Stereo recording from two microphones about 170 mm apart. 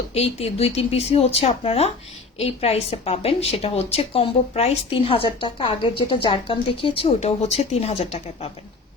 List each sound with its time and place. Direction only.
0.1 s speech: 35° left (ahead or behind)